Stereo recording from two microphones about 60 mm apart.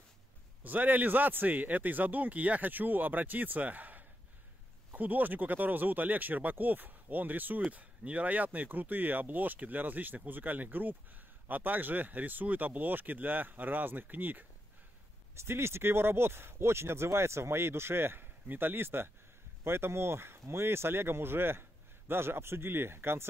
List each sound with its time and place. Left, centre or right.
0.7 s speech: right
15.3 s speech: right